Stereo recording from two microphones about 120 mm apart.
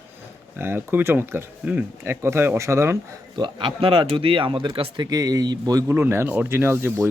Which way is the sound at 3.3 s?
40° right (ahead or behind).